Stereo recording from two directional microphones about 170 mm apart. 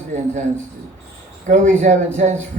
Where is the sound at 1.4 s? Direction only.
45° right (ahead or behind).